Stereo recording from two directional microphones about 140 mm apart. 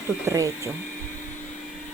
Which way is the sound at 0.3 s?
20° right (ahead or behind).